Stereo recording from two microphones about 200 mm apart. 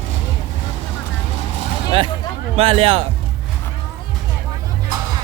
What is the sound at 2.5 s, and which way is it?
Speech, 30° right (ahead or behind).